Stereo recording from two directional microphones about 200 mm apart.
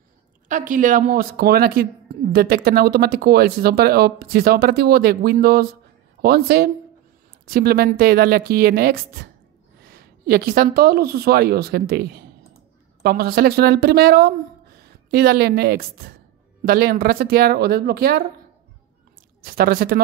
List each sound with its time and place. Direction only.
0.5 s speech: 40° right (ahead or behind)
19.4 s speech: 50° right (ahead or behind)